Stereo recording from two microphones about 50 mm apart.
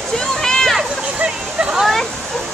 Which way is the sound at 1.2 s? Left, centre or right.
Right.